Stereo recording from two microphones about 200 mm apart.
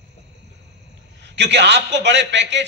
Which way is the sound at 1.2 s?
60° right (ahead or behind).